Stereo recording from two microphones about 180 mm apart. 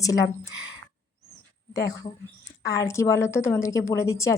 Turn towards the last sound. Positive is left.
turn(degrees=15)  # may be behind; listen again after turning